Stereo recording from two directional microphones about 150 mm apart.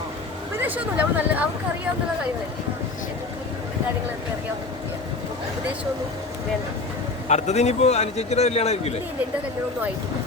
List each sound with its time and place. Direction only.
0.6 s speech: 10° right (ahead or behind)
7.3 s a man's voice: 50° left (ahead or behind)